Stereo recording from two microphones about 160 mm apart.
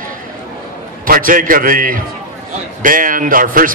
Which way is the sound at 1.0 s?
60° right (ahead or behind).